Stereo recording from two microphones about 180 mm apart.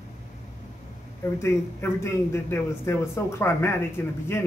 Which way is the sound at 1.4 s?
15° left (ahead or behind).